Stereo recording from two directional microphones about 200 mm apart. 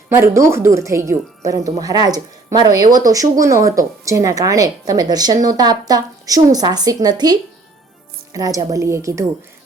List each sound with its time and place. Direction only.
0.1 s speech: 15° right (ahead or behind)